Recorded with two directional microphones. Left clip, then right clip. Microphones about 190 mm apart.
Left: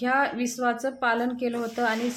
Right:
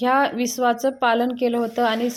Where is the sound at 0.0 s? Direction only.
35° right (ahead or behind).